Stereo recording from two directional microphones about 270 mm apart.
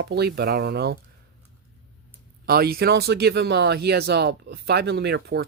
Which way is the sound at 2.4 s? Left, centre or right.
Right.